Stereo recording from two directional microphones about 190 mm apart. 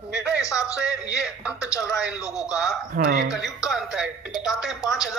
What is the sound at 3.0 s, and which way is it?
Speech, 65° right (ahead or behind).